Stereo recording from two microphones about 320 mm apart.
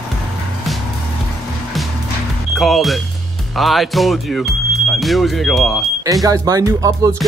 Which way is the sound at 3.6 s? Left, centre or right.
Centre.